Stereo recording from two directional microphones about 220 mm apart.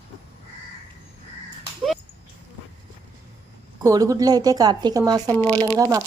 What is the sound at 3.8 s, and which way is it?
Speech, 15° right (ahead or behind).